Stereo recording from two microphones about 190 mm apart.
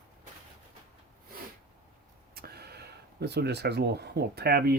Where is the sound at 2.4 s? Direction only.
55° right (ahead or behind).